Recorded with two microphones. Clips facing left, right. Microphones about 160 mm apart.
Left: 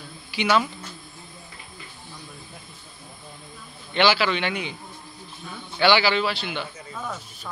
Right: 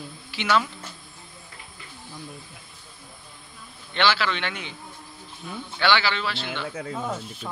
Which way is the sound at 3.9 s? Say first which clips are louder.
Left 3 dB; 5° left (ahead or behind).